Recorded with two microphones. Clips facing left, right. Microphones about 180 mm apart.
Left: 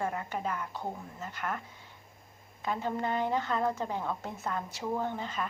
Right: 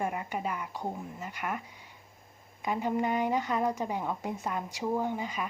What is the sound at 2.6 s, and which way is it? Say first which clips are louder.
Speech: right 3 dB; 15° right (ahead or behind).